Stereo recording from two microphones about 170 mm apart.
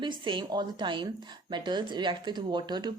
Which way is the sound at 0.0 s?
30° right (ahead or behind).